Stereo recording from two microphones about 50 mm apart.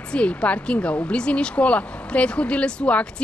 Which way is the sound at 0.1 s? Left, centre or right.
Left.